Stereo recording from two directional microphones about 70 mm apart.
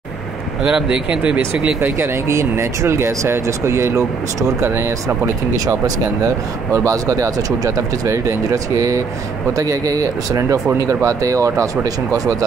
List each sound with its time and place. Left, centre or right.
0.7 s speech: centre
1.6 s speech: right
6.9 s speech: right